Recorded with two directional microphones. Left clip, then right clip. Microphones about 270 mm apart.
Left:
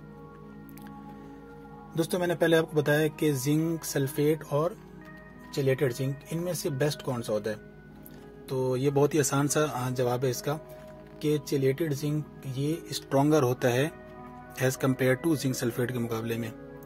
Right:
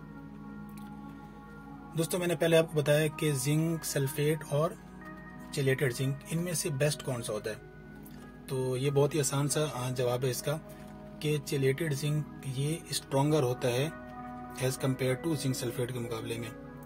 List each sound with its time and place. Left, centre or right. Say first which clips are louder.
2.0 s speech: left 4 dB; centre